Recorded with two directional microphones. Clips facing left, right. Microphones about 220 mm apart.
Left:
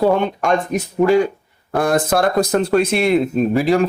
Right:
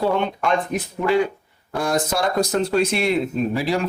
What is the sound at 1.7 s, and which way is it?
Speech, 55° left (ahead or behind).